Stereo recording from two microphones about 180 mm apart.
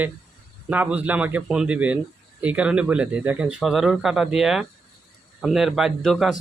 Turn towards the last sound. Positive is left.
turn(degrees=0)  # may be behind; listen again after turning